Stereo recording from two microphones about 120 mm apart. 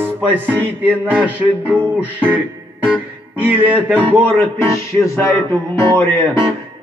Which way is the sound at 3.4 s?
15° right (ahead or behind).